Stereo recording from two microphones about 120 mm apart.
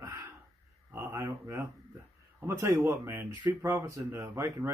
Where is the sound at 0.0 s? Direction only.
30° right (ahead or behind).